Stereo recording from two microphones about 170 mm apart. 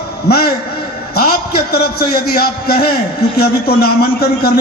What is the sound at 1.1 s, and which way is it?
A man's voice, 65° left (ahead or behind).